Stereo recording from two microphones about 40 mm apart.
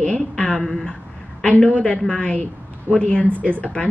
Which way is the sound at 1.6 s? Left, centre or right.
Left.